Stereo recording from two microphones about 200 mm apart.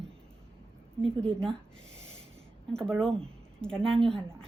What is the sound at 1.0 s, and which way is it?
Speech, 5° left (ahead or behind).